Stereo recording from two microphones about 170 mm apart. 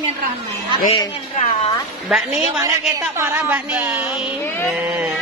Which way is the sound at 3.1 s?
15° right (ahead or behind).